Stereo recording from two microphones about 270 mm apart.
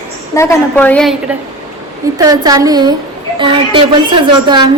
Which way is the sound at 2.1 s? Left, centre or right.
Centre.